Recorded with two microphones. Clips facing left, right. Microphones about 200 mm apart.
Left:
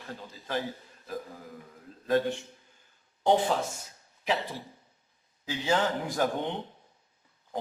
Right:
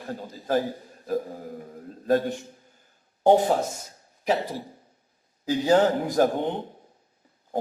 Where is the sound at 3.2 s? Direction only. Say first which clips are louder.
Right 6 dB; 40° right (ahead or behind).